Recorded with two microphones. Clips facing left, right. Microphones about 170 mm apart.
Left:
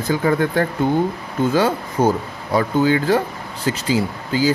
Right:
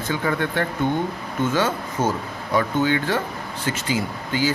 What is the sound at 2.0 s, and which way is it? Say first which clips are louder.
Speech: left 6 dB; 15° left (ahead or behind).